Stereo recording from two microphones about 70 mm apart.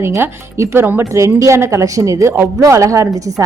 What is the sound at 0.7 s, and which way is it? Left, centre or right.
Speech, right.